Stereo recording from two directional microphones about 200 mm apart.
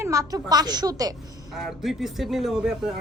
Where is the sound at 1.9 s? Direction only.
Centre (ahead or behind).